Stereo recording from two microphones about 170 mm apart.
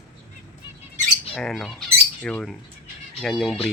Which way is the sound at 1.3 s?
5° left (ahead or behind).